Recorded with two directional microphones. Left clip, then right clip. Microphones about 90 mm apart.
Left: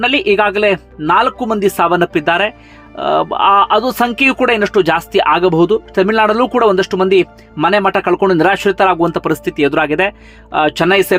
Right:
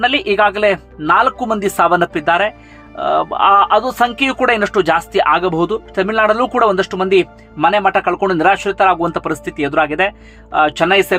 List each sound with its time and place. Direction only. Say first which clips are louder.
0.0 s speech: left 1 dB; 25° left (ahead or behind); by 4.4 s 45° left (ahead or behind)
4.4 s speech: left 2 dB; 25° left (ahead or behind)
5.2 s speech: left 5 dB; 35° left (ahead or behind)
6.5 s speech: left 2 dB; 25° left (ahead or behind); by 9.0 s 50° left (ahead or behind)
9.0 s speech: left 3 dB; 35° left (ahead or behind)